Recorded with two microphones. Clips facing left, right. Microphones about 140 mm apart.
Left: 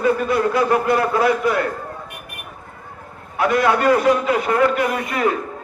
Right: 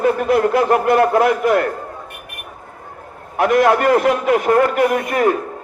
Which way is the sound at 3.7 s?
55° right (ahead or behind).